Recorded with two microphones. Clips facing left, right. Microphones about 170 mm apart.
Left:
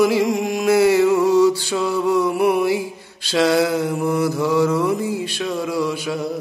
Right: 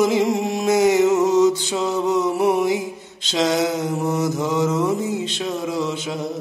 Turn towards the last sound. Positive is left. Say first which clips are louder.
# left 2 dB
turn(degrees=-20)  # may be behind; listen again after turning